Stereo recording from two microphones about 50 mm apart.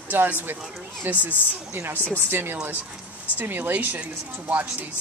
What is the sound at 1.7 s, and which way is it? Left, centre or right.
Speech, right.